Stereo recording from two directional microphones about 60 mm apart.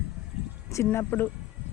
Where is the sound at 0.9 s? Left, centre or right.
Left.